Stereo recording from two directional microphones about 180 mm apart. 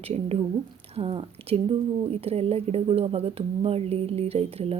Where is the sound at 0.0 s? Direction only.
35° right (ahead or behind).